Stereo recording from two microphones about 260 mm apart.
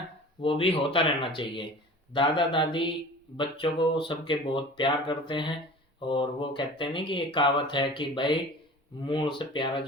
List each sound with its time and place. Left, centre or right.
0.4 s speech: left